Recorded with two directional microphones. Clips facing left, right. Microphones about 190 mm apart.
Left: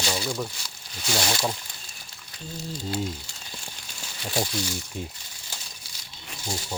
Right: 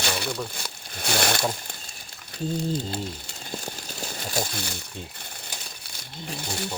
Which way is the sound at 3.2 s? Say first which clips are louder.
Right 8 dB; 50° right (ahead or behind).